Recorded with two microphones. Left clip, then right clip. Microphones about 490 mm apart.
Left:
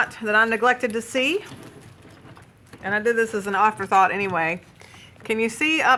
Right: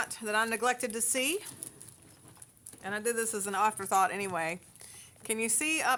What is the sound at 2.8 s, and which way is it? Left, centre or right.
Speech, right.